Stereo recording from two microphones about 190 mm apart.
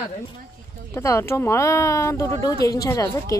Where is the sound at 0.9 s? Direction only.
15° left (ahead or behind).